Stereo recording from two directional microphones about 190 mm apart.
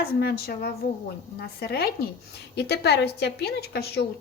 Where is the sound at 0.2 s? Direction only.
55° left (ahead or behind).